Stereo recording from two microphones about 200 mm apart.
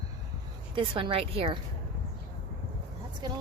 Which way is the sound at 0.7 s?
25° right (ahead or behind).